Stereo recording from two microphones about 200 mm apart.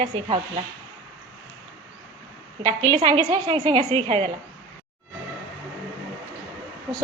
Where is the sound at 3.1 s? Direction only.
20° right (ahead or behind).